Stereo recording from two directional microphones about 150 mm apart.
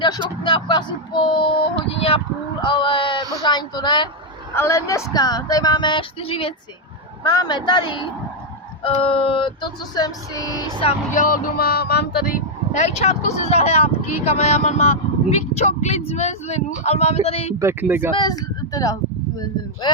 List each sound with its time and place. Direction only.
0.4 s speech: 35° left (ahead or behind)
4.5 s speech: 20° left (ahead or behind); by 6.5 s 35° left (ahead or behind)
7.3 s female singing: 30° left (ahead or behind)
10.8 s speech: 60° left (ahead or behind); by 12.4 s 85° left
12.7 s a woman's voice: 45° left (ahead or behind)
17.6 s speech: 15° right (ahead or behind)
18.1 s speech: 25° left (ahead or behind)